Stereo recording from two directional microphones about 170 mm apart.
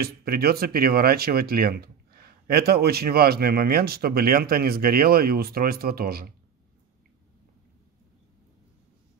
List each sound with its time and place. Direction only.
0.0 s speech: 65° right (ahead or behind)